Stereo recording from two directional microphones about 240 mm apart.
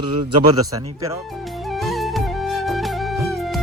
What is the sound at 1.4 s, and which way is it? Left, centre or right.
Music, centre.